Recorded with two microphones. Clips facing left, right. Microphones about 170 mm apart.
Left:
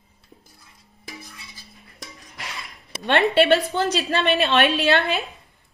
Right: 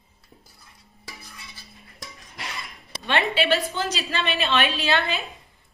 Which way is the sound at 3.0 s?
60° left (ahead or behind).